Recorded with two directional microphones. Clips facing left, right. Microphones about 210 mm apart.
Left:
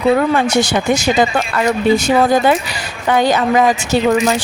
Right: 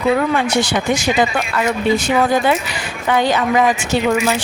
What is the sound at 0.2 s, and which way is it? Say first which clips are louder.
A woman's voice: left 3 dB; 40° left (ahead or behind).